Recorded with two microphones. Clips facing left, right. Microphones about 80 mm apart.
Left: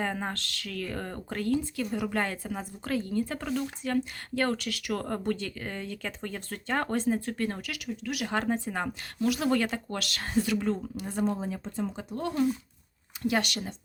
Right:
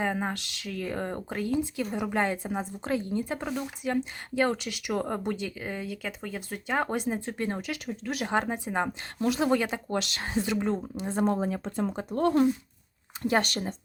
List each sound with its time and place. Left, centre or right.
0.0 s speech: centre
7.9 s speech: right
8.3 s speech: centre
11.3 s speech: right
13.2 s speech: right